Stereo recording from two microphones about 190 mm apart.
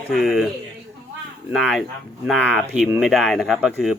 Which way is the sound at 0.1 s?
Centre (ahead or behind).